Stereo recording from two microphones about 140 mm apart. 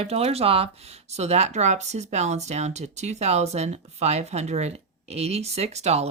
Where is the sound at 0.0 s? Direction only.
45° right (ahead or behind).